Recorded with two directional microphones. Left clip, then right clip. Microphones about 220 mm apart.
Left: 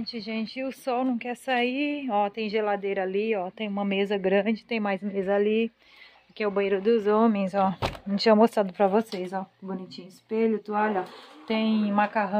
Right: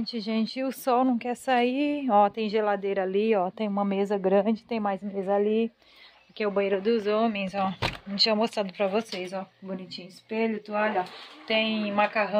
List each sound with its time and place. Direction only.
0.0 s a woman's voice: 20° right (ahead or behind); by 3.2 s 5° right (ahead or behind)
3.2 s a woman's voice: 15° right (ahead or behind)
3.7 s speech: centre (ahead or behind)
4.8 s speech: 10° left (ahead or behind)
7.2 s speech: 25° left (ahead or behind)
9.7 s speech: centre (ahead or behind)